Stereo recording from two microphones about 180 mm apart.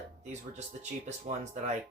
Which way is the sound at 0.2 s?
40° right (ahead or behind).